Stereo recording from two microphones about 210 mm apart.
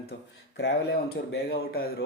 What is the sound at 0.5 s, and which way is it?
Speech, 55° left (ahead or behind).